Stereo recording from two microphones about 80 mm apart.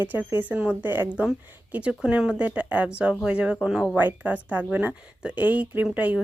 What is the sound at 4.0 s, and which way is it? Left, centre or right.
Speech, right.